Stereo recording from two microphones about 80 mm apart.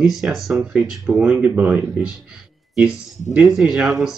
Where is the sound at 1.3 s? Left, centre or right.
Right.